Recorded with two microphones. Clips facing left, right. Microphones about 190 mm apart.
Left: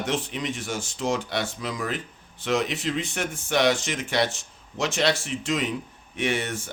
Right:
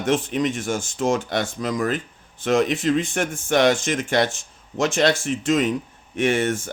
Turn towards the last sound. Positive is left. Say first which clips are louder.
# right 6 dB
turn(degrees=-45)  # may be behind; listen again after turning